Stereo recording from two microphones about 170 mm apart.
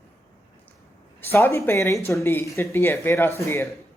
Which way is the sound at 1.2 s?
15° left (ahead or behind).